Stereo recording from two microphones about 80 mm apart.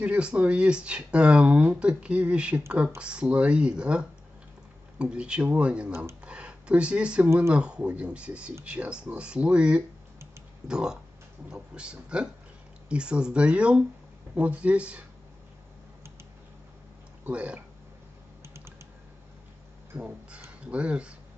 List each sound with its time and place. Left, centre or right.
0.0 s speech: centre
5.9 s speech: right
6.2 s a sound: centre
7.5 s speech: centre
17.2 s speech: centre
20.0 s speech: centre